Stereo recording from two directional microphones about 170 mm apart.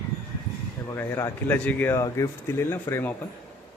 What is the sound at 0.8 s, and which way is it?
Speech, 15° left (ahead or behind).